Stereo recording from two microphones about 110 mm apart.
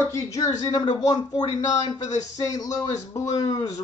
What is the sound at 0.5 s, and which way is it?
Speech, 40° left (ahead or behind).